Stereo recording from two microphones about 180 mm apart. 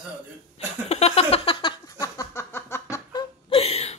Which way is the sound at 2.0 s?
15° left (ahead or behind).